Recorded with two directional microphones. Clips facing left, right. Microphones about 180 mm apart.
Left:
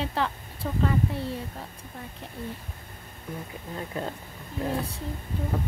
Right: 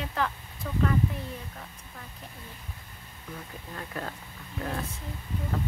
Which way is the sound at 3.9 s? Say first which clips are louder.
Left 3 dB; 20° left (ahead or behind).